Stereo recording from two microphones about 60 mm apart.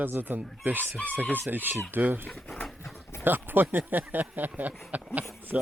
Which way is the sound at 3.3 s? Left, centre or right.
Right.